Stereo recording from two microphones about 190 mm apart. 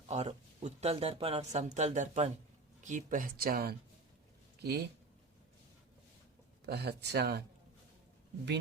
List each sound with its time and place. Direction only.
0.1 s speech: 35° right (ahead or behind); by 4.9 s 60° right (ahead or behind)
6.7 s speech: 60° right (ahead or behind)